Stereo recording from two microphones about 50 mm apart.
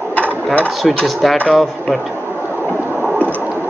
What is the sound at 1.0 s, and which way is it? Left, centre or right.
Speech, centre.